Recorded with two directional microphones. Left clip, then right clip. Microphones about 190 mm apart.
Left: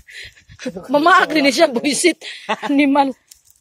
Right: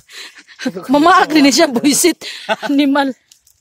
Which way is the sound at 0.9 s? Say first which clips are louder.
Right 3 dB; 35° right (ahead or behind).